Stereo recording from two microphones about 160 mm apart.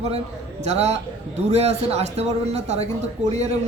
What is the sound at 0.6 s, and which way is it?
A man's voice, 45° right (ahead or behind).